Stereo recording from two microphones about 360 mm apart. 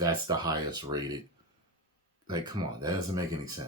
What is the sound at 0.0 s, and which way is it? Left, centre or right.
Speech, centre.